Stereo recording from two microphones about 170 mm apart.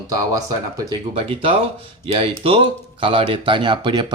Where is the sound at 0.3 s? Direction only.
20° right (ahead or behind).